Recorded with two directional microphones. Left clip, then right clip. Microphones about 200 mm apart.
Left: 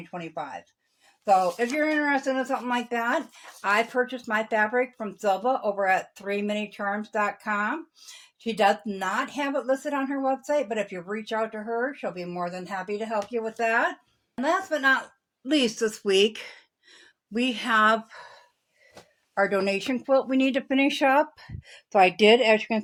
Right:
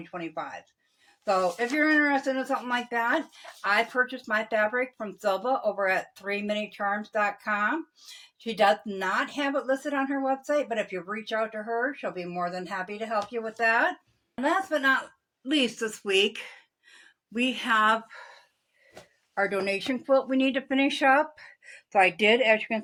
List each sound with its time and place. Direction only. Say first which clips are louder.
0.1 s speech: left 1 dB; 25° left (ahead or behind)
14.4 s a woman's voice: left 1 dB; 50° left (ahead or behind)
19.3 s speech: left 3 dB; 40° left (ahead or behind)
22.2 s a woman's voice: left 3 dB; 60° left (ahead or behind)